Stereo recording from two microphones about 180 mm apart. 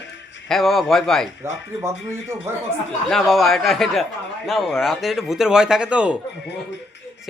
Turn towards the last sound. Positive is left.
turn(degrees=-5)  # may be behind; listen again after turning